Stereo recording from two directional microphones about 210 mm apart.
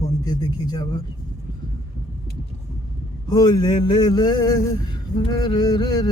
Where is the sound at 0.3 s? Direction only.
20° left (ahead or behind).